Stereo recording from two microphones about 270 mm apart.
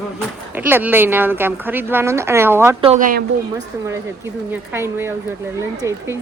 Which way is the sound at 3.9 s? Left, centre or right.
Centre.